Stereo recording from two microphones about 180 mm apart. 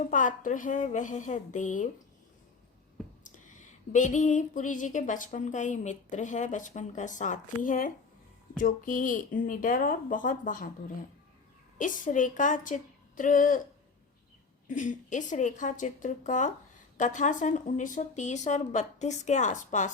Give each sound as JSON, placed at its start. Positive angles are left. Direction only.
{"t": 0.1, "sound": "a woman's voice", "side_deg": 45}
{"t": 3.9, "sound": "a woman's voice", "side_deg": 45}
{"t": 11.8, "sound": "a woman's voice", "side_deg": 45}
{"t": 14.7, "sound": "a woman's voice", "side_deg": 45}